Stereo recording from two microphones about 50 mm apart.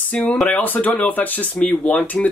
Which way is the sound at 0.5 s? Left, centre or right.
Left.